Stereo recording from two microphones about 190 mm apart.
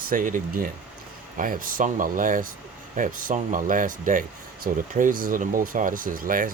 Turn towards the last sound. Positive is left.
turn(degrees=-45)  # may be behind; listen again after turning